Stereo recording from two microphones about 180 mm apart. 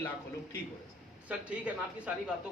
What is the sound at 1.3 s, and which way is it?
Speech, 5° right (ahead or behind).